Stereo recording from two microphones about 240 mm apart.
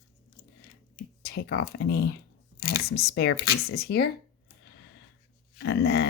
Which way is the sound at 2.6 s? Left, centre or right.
Left.